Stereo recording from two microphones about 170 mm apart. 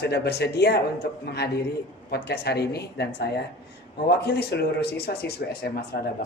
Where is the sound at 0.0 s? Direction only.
75° left (ahead or behind).